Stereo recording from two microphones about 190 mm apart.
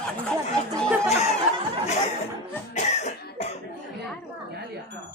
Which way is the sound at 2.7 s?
35° left (ahead or behind).